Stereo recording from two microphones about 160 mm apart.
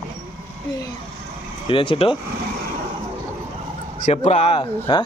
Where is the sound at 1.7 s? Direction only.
35° left (ahead or behind).